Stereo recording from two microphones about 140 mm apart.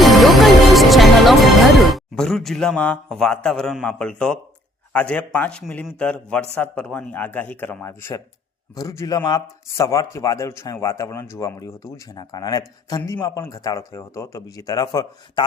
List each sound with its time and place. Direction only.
0.0 s music: centre (ahead or behind)
4.9 s a man's voice: 10° left (ahead or behind); by 15.4 s 25° left (ahead or behind)